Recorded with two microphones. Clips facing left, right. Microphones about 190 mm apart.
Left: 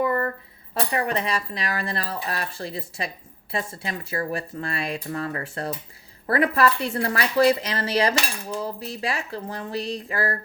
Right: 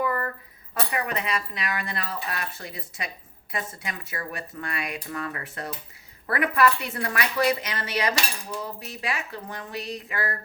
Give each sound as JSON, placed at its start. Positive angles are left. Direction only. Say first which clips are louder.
{"t": 0.0, "sound": "speech", "louder": "left 4 dB", "side_deg": 25}